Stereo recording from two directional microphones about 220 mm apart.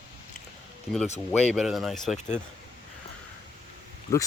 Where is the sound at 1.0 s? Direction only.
30° left (ahead or behind).